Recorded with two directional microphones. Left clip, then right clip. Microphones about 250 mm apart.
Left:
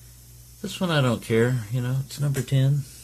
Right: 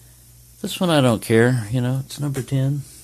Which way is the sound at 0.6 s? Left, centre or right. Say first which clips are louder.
Right 6 dB; right.